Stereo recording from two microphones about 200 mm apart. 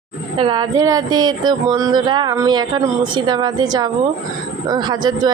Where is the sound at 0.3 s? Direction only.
20° right (ahead or behind).